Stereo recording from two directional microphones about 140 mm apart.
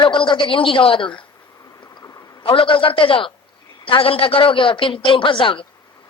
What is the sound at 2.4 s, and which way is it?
Speech, 40° left (ahead or behind).